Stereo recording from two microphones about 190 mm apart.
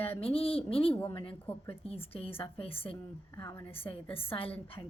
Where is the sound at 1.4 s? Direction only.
10° left (ahead or behind).